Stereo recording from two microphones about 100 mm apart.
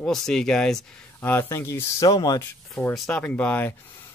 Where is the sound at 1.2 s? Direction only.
25° left (ahead or behind); by 2.4 s 40° left (ahead or behind).